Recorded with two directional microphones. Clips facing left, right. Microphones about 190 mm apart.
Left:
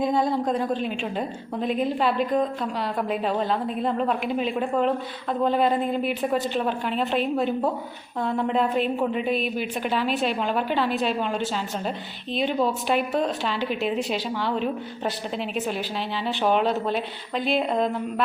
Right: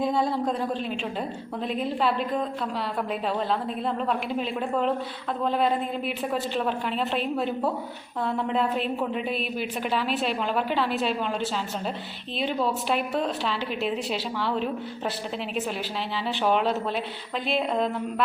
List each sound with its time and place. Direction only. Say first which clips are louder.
0.0 s a woman's voice: left 2 dB; centre (ahead or behind)
16.2 s a woman's voice: left 2 dB; centre (ahead or behind)